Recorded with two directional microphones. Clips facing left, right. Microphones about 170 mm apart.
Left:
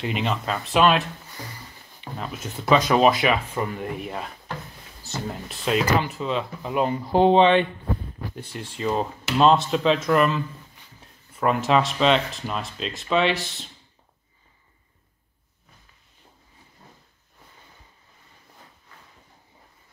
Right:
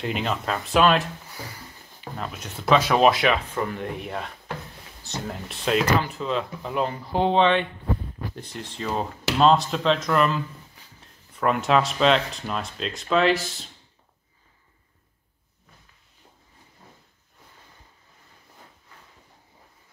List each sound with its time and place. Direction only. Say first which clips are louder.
0.0 s speech: left 1 dB; centre (ahead or behind); by 7.6 s 15° left (ahead or behind)
8.4 s speech: left 5 dB; 5° left (ahead or behind)